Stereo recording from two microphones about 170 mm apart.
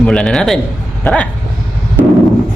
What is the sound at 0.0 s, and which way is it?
A man's voice, 5° left (ahead or behind).